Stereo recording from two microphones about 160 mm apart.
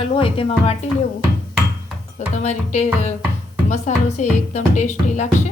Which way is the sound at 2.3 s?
45° left (ahead or behind).